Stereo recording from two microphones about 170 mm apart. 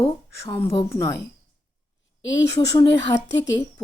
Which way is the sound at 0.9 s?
20° left (ahead or behind).